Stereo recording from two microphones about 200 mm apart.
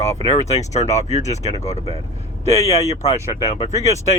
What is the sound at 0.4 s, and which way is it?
Speech, 35° left (ahead or behind).